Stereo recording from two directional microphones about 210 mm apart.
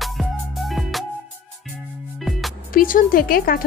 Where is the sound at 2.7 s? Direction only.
40° left (ahead or behind).